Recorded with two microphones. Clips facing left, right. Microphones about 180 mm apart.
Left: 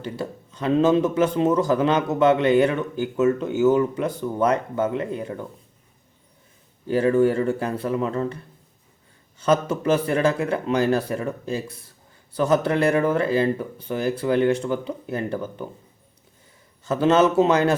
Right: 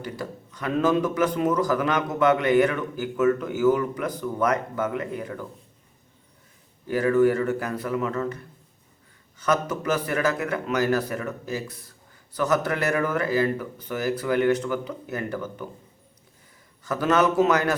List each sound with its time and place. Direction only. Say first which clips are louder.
0.0 s a man's voice: left 3 dB; 25° left (ahead or behind)
6.8 s a man's voice: left 1 dB; 30° left (ahead or behind)
9.4 s a man's voice: left 4 dB; 30° left (ahead or behind)
16.8 s a man's voice: left 4 dB; 25° left (ahead or behind)